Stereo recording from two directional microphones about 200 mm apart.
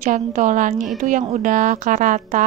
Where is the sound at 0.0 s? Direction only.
40° right (ahead or behind).